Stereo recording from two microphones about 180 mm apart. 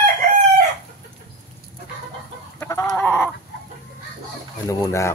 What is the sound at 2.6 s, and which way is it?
Chicken, 15° left (ahead or behind).